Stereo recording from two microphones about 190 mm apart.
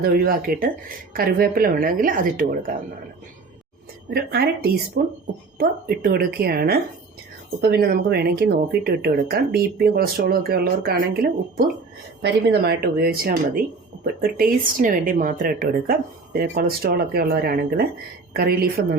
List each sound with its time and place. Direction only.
0.0 s speech: 50° right (ahead or behind)
4.1 s speech: 55° right (ahead or behind)